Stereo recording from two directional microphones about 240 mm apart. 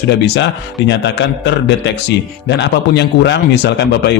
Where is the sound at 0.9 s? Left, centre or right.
Left.